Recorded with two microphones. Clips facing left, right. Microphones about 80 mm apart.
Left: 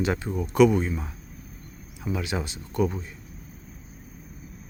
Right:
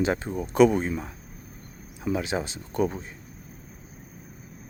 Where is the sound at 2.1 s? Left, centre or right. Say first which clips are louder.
Right 2 dB; right.